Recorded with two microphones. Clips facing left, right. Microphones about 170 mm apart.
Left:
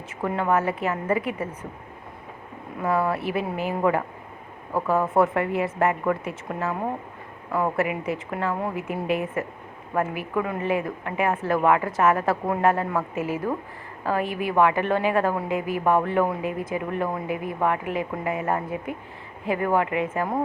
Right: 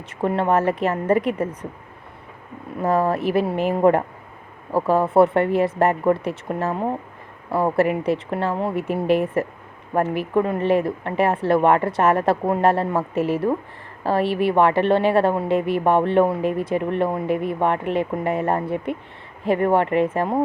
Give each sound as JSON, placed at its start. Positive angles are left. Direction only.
{"t": 0.2, "sound": "speech", "side_deg": -30}
{"t": 2.8, "sound": "speech", "side_deg": -40}